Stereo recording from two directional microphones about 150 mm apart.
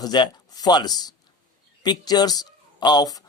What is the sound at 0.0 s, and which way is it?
Speech, 25° left (ahead or behind).